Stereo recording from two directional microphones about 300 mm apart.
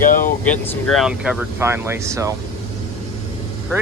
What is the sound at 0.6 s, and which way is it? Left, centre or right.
Speech, centre.